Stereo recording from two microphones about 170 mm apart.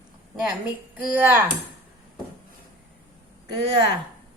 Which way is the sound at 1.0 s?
10° right (ahead or behind).